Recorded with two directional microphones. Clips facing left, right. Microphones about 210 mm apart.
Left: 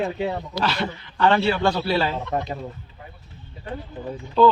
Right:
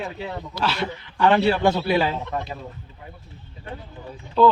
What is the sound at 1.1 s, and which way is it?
Speech, 15° right (ahead or behind).